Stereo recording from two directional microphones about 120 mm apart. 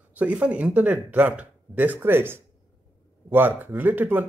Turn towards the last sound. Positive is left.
turn(degrees=-15)  # may be behind; listen again after turning